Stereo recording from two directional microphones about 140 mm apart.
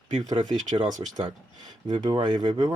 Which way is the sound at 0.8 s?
60° right (ahead or behind).